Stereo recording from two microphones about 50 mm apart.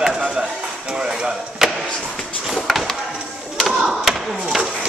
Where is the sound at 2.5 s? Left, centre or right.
Centre.